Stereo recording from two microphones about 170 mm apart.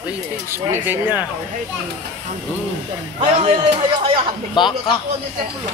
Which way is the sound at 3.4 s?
35° right (ahead or behind).